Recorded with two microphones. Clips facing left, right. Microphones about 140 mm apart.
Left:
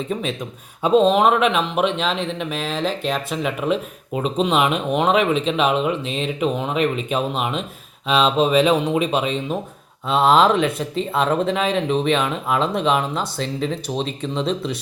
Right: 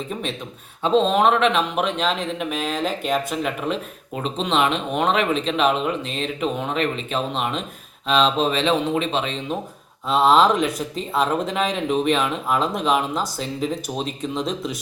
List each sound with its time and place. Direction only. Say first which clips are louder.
0.8 s speech: left 3 dB; 10° left (ahead or behind)